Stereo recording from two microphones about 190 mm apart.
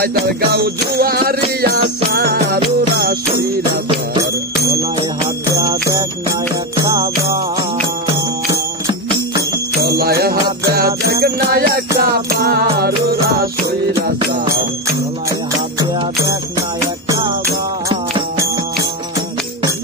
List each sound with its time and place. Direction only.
0.0 s music: 55° right (ahead or behind)
2.1 s jingle bell: 55° right (ahead or behind)
5.5 s jingle bell: 20° right (ahead or behind)
6.8 s music: 20° right (ahead or behind)
9.8 s jingle bell: 55° right (ahead or behind)
11.1 s music: 55° right (ahead or behind)
17.8 s music: 15° right (ahead or behind)